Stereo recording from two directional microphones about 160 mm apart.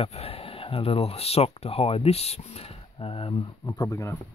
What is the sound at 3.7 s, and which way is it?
Speech, 20° left (ahead or behind).